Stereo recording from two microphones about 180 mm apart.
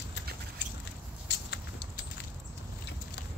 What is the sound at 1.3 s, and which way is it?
Patter, 70° left (ahead or behind).